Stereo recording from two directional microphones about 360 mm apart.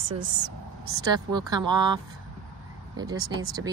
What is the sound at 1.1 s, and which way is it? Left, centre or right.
Speech, centre.